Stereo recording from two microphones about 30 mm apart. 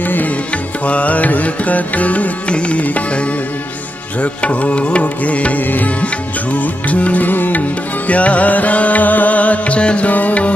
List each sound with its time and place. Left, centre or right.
0.0 s music: left
0.8 s music: left
2.4 s music: left
4.2 s music: left
5.6 s music: left
6.5 s music: left
7.2 s music: left
8.1 s music: left
9.8 s music: left
10.0 s music: left